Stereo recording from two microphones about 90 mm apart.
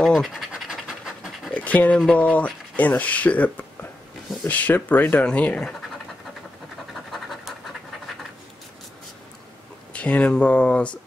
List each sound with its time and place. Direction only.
0.0 s scratch: centre (ahead or behind)
1.5 s dog: 15° left (ahead or behind)
2.0 s speech: 10° left (ahead or behind)
6.9 s scratch: centre (ahead or behind)
9.9 s speech: 15° left (ahead or behind)